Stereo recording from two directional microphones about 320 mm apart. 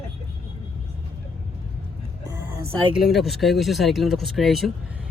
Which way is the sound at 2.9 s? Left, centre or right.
Centre.